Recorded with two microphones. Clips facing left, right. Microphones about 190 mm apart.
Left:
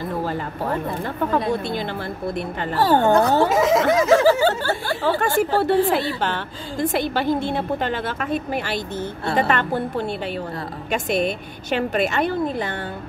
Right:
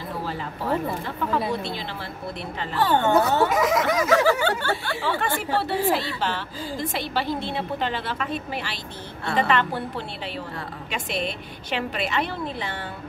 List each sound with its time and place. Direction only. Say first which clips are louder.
1.0 s a woman's voice: left 4 dB; 50° left (ahead or behind)
3.3 s speech: left 4 dB; 25° left (ahead or behind)
5.0 s a woman's voice: left 8 dB; 45° left (ahead or behind)